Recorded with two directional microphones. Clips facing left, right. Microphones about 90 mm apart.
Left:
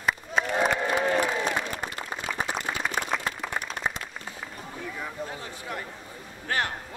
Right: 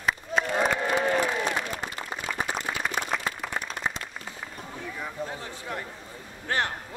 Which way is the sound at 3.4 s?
10° left (ahead or behind).